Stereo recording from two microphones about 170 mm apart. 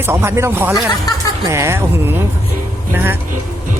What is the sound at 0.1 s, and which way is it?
Speech, 15° right (ahead or behind).